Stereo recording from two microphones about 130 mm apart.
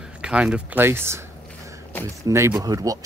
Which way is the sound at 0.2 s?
10° right (ahead or behind).